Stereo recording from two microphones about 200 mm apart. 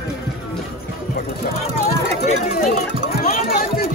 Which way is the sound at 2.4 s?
40° left (ahead or behind).